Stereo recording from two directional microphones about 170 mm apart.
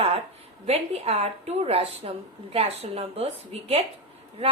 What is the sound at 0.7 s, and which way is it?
A woman's voice, 40° right (ahead or behind).